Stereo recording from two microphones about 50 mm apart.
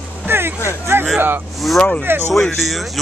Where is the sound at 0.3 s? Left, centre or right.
Right.